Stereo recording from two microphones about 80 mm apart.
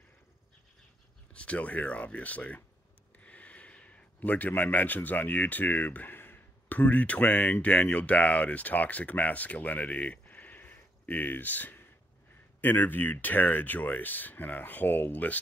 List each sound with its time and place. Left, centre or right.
1.3 s speech: centre